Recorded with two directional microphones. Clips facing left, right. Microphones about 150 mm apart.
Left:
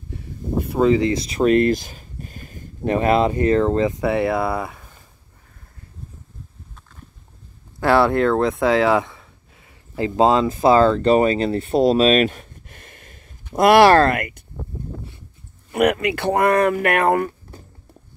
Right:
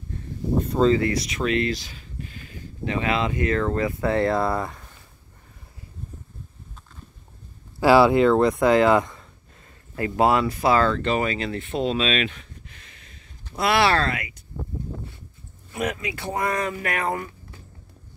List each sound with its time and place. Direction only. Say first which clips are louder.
0.1 s a sound: even; 10° left (ahead or behind)
1.2 s speech: left 8 dB; 35° left (ahead or behind)
1.5 s speech: left 8 dB; 50° left (ahead or behind); by 3.9 s 25° left (ahead or behind)
4.0 s speech: left 2 dB; 10° left (ahead or behind)
7.8 s speech: right 1 dB; 5° right (ahead or behind)
9.9 s speech: left 4 dB; 20° left (ahead or behind); by 14.4 s 55° left (ahead or behind)
15.7 s speech: left 10 dB; 65° left (ahead or behind)